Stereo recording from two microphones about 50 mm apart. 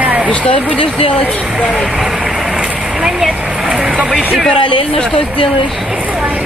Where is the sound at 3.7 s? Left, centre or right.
Centre.